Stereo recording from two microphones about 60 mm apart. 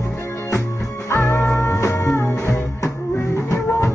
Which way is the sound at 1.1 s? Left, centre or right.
Left.